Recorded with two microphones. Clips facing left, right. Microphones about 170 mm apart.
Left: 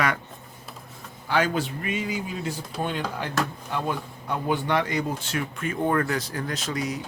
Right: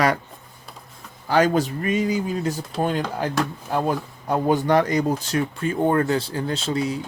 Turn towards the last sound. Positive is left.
turn(degrees=-30)  # may be behind; listen again after turning